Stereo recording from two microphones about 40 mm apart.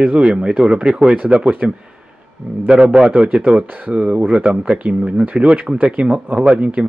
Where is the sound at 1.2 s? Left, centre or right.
Right.